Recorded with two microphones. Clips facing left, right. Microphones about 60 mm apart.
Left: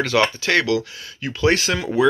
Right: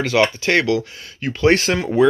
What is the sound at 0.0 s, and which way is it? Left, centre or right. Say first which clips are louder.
Speech: right 2 dB; right.